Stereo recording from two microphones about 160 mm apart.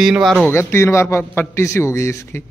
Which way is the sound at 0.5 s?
15° left (ahead or behind).